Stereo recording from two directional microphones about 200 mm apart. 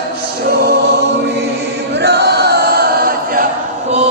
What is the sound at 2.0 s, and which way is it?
Chant, 55° right (ahead or behind).